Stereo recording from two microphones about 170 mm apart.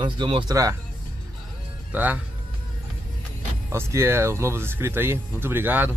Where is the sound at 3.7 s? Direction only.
15° right (ahead or behind).